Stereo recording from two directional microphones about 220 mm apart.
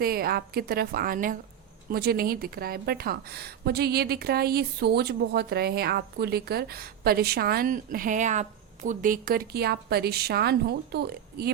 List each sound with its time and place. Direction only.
0.0 s a woman's voice: 45° right (ahead or behind)